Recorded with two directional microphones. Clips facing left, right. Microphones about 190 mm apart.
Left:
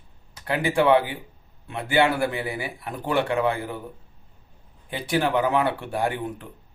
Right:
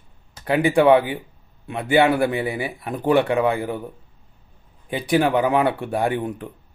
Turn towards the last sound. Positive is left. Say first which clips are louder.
# right 4 dB
turn(degrees=-15)  # may be behind; listen again after turning